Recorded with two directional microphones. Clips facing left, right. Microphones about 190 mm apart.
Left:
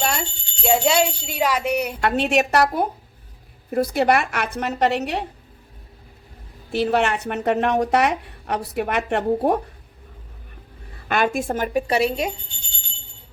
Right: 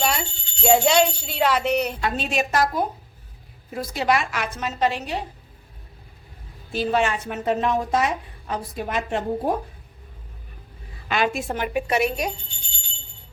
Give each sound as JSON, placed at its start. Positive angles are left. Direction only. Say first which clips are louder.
{"t": 0.0, "sound": "alarm clock", "louder": "even", "side_deg": 0}
{"t": 2.0, "sound": "a woman's voice", "louder": "left 5 dB", "side_deg": 65}
{"t": 6.7, "sound": "speech", "louder": "left 2 dB", "side_deg": 65}
{"t": 11.1, "sound": "a woman's voice", "louder": "left 3 dB", "side_deg": 50}